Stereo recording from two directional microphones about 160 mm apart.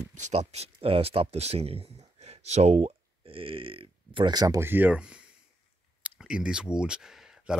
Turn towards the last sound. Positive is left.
turn(degrees=-5)  # may be behind; listen again after turning